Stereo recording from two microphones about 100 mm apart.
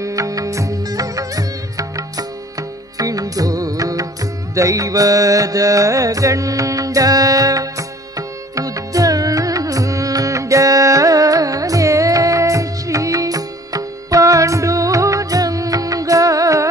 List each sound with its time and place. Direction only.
0.0 s music: 35° right (ahead or behind)